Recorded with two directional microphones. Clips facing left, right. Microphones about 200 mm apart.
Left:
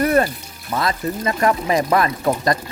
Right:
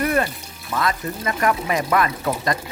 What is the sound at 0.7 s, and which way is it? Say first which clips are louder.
Speech: left 2 dB; 35° left (ahead or behind).